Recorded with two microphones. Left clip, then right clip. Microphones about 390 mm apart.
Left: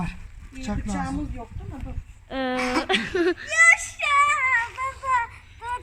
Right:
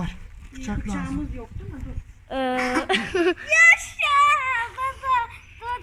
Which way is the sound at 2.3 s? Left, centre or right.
Centre.